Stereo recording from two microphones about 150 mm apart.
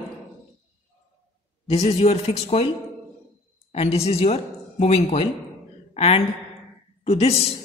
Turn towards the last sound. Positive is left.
turn(degrees=45)  # may be behind; listen again after turning